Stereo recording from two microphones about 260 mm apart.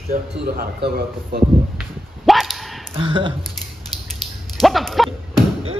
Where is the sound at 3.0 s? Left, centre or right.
Centre.